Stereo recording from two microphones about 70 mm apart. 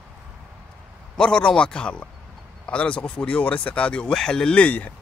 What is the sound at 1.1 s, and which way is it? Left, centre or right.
Speech, centre.